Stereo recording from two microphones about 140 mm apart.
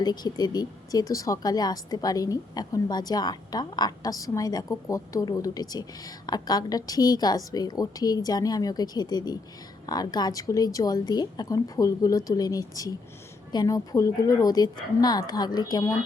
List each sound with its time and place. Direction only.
0.0 s speech: 30° left (ahead or behind)